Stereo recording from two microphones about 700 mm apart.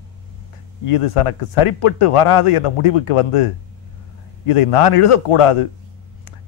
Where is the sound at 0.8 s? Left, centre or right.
Left.